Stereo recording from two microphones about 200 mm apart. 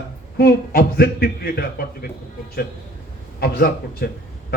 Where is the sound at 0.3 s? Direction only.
50° left (ahead or behind).